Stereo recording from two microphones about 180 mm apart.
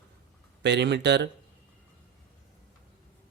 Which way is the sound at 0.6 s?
70° right (ahead or behind).